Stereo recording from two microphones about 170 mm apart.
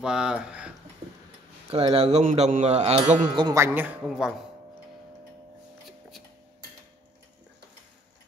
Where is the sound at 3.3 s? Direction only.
25° right (ahead or behind).